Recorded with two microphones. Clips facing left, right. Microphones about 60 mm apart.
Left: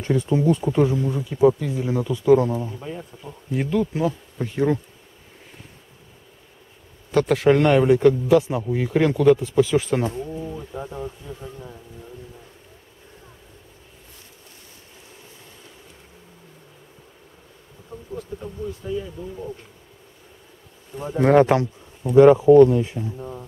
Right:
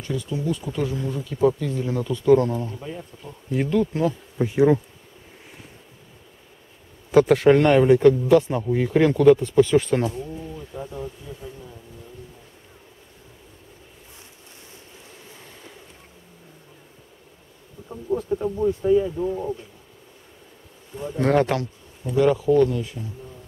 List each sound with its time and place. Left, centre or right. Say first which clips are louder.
0.0 s speech: left 7 dB; left; by 4.1 s centre
4.4 s bee: right 4 dB; centre
7.1 s speech: right 2 dB; centre
10.1 s a sound: left 3 dB; centre
18.1 s a sound: right 10 dB; right
18.7 s speech: right 11 dB; right
21.2 s speech: left 5 dB; centre
23.1 s speech: left 7 dB; left